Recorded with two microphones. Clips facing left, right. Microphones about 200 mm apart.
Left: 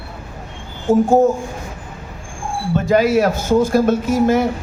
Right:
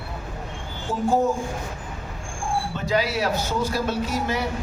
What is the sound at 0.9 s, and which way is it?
Speech, 45° left (ahead or behind).